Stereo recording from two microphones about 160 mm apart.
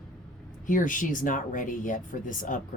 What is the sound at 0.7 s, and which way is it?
Speech, 55° left (ahead or behind).